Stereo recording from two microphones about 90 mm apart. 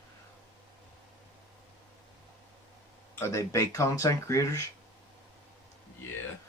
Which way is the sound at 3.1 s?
30° left (ahead or behind).